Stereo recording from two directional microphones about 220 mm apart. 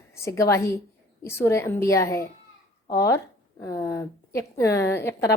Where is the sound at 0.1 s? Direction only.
15° left (ahead or behind).